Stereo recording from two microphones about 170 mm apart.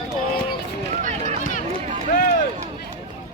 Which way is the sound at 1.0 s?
50° right (ahead or behind).